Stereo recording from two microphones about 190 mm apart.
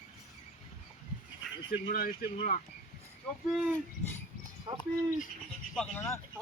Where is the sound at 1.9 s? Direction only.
50° left (ahead or behind).